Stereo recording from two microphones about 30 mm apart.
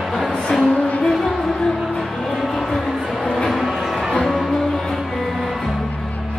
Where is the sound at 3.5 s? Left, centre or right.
Centre.